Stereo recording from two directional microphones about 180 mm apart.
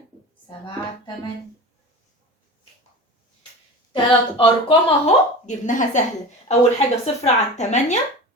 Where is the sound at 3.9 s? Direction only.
30° left (ahead or behind).